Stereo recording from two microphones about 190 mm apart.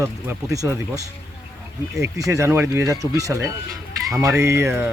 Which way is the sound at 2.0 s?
15° right (ahead or behind).